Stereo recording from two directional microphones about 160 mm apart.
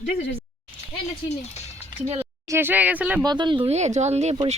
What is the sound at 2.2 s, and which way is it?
Speech, 15° right (ahead or behind).